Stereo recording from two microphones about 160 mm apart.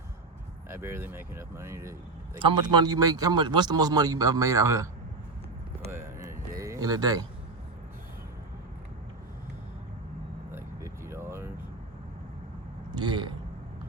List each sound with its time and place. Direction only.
0.7 s speech: 15° right (ahead or behind)
5.9 s a sound: 15° right (ahead or behind)
10.5 s vehicle: 15° right (ahead or behind)
12.9 s speech: 30° right (ahead or behind)